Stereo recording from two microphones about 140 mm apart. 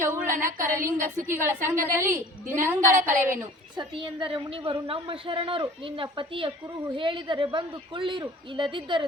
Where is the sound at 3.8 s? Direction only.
35° right (ahead or behind).